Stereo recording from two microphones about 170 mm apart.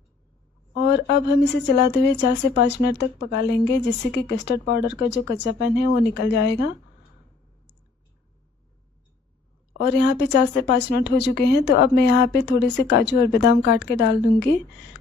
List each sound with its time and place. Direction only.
0.7 s speech: 80° left
9.8 s speech: 75° left (ahead or behind)